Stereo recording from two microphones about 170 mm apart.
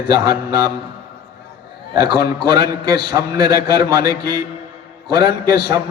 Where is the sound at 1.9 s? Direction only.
25° right (ahead or behind).